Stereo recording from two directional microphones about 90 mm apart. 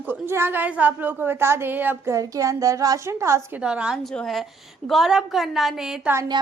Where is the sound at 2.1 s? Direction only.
35° right (ahead or behind).